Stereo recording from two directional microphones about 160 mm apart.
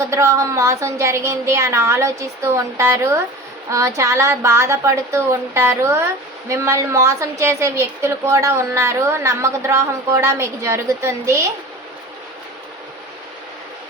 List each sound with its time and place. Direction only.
0.1 s a woman's voice: 20° right (ahead or behind)